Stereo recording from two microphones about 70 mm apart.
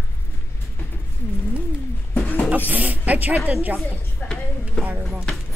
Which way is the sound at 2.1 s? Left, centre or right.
Left.